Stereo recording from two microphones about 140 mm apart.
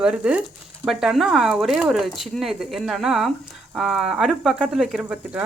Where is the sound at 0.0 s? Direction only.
5° right (ahead or behind).